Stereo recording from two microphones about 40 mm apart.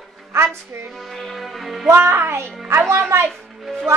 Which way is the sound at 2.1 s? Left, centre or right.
Right.